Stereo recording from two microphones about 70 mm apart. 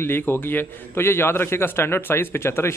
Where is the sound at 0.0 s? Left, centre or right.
Left.